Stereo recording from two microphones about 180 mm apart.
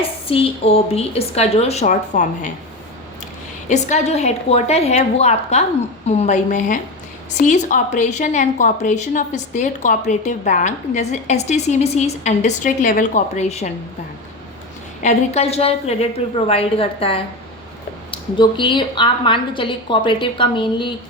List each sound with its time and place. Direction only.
0.3 s a woman's voice: 30° left (ahead or behind)
3.7 s a woman's voice: 40° left (ahead or behind)
15.0 s a woman's voice: 35° left (ahead or behind)